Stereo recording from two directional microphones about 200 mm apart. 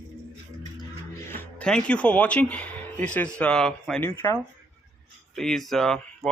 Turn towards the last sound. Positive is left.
turn(degrees=0)  # may be behind; listen again after turning